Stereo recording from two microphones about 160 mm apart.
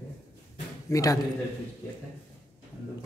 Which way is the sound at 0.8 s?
20° left (ahead or behind).